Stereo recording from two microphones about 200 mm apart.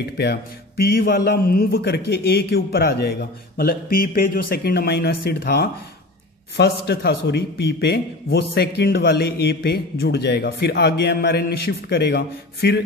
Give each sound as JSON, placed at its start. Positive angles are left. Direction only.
{"t": 0.2, "sound": "a man's voice", "side_deg": 50}